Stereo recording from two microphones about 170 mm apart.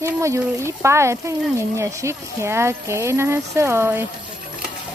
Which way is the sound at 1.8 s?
15° right (ahead or behind).